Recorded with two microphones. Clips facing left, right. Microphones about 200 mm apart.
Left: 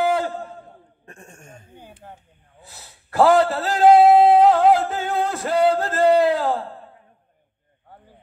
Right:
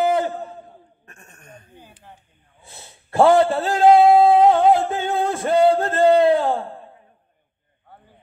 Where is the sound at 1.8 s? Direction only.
55° left (ahead or behind).